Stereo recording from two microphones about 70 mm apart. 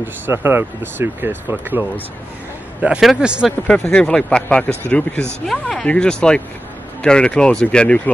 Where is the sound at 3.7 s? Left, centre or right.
Centre.